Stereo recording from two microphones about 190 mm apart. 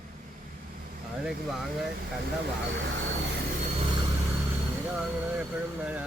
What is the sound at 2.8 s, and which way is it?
Speech, 65° right (ahead or behind).